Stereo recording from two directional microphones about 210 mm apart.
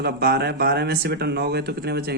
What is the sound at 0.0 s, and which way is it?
Speech, 50° right (ahead or behind).